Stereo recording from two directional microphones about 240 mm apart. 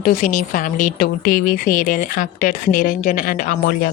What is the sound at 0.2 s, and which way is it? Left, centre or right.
Speech, left.